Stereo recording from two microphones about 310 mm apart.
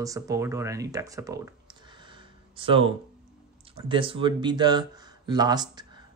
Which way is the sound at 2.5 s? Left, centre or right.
Centre.